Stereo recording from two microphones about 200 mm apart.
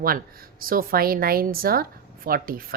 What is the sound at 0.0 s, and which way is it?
A woman's voice, 45° right (ahead or behind).